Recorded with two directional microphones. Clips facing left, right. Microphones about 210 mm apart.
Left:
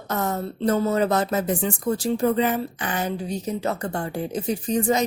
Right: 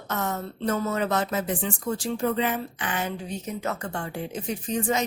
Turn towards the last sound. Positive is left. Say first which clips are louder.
# left 5 dB
turn(degrees=35)  # may be behind; listen again after turning